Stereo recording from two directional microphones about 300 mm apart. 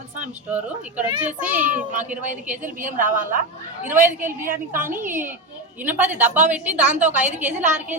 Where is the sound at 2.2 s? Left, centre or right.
Right.